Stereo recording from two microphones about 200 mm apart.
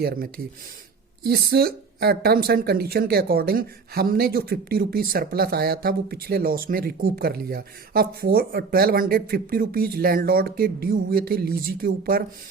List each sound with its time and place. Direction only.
0.0 s speech: 50° right (ahead or behind)